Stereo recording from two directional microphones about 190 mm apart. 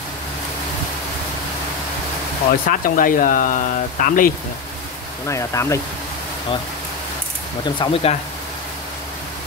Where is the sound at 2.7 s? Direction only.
45° left (ahead or behind).